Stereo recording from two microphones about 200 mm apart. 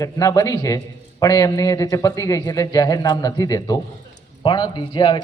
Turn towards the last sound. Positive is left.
turn(degrees=20)  # may be behind; listen again after turning